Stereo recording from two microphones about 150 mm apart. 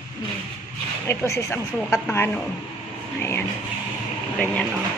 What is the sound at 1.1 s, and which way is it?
A woman's voice, 15° left (ahead or behind).